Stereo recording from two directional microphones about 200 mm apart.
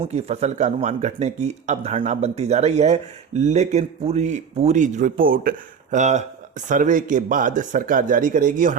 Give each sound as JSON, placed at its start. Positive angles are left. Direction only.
{"t": 0.0, "sound": "speech", "side_deg": -30}